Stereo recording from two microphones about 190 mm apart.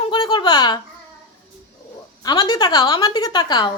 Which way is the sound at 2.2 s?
20° left (ahead or behind).